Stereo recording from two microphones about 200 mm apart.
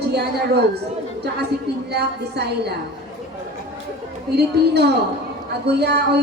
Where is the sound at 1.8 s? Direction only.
55° right (ahead or behind).